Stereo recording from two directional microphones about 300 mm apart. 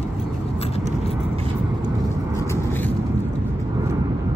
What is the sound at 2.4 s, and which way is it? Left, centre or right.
Vehicle, centre.